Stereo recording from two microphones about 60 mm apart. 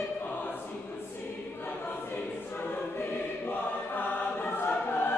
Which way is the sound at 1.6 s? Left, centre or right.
Left.